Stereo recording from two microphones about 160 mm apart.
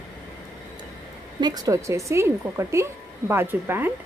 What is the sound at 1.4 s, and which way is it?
A woman's voice, 25° right (ahead or behind).